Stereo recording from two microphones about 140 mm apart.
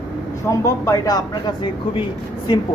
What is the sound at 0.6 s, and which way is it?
A woman's voice, 25° left (ahead or behind).